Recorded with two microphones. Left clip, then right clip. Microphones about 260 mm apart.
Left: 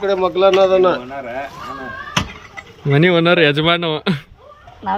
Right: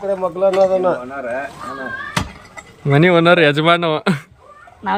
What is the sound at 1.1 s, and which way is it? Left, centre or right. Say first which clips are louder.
Speech: right 2 dB; centre.